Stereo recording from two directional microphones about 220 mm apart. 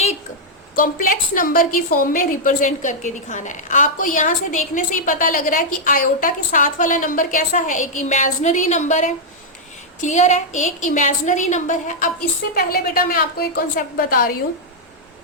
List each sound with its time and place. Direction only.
0.8 s a woman's voice: 40° left (ahead or behind)